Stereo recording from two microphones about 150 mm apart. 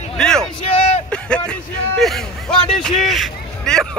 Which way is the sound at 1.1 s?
5° left (ahead or behind).